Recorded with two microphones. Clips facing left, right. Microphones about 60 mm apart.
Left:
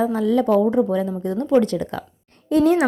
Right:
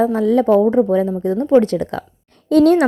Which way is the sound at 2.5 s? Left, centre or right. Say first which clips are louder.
Right 5 dB; right.